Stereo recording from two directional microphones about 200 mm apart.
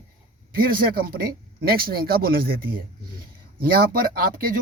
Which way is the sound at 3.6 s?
45° right (ahead or behind).